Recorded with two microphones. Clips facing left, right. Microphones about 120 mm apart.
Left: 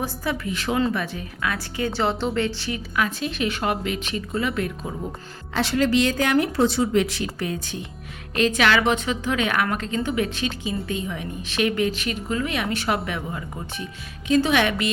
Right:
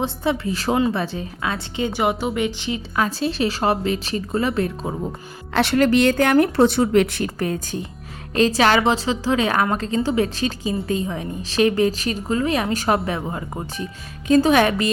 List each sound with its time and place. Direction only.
0.0 s a woman's voice: 30° right (ahead or behind)
2.9 s a woman's voice: 35° right (ahead or behind)
5.5 s a woman's voice: 60° right (ahead or behind); by 14.8 s 40° right (ahead or behind)